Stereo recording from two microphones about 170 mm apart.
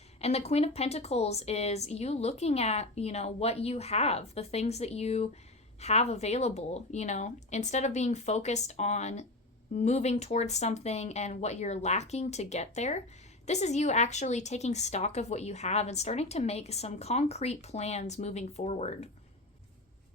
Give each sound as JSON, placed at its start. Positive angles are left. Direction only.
{"t": 0.2, "sound": "a woman's voice", "side_deg": 40}